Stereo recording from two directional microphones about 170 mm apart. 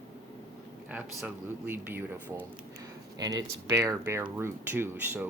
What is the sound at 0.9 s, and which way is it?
Speech, 10° right (ahead or behind).